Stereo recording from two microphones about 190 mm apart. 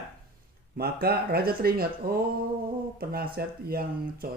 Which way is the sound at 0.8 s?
55° right (ahead or behind).